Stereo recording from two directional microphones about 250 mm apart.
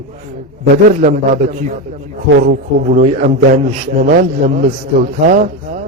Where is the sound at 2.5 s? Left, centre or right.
Right.